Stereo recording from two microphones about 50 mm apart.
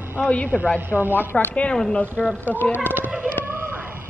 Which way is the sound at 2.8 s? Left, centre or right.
Right.